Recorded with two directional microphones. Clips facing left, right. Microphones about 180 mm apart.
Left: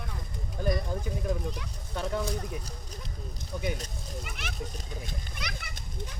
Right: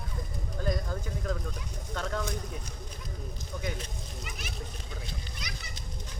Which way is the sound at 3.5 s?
15° left (ahead or behind).